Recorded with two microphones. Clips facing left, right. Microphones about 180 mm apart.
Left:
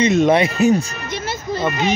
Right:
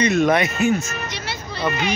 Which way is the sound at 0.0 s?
20° left (ahead or behind).